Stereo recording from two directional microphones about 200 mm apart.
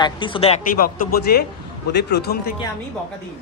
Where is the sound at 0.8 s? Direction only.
50° left (ahead or behind).